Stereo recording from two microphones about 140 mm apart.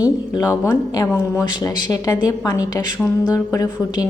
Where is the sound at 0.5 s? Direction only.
25° left (ahead or behind).